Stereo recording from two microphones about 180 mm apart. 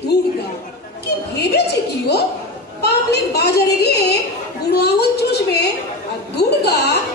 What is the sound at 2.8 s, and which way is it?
A woman's voice, 65° left (ahead or behind).